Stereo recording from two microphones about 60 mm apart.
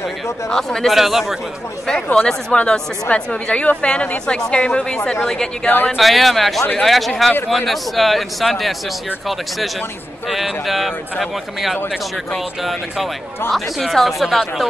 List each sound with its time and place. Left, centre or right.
0.5 s a woman's voice: centre
0.9 s speech: centre
2.1 s a woman's voice: centre
5.7 s speech: left
5.9 s speech: centre
10.3 s speech: centre
12.3 s speech: centre